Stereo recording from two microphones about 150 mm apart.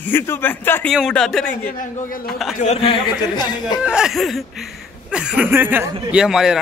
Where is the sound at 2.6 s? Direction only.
40° left (ahead or behind).